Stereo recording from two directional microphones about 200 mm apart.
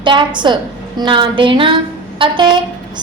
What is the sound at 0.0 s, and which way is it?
A woman's voice, 25° right (ahead or behind).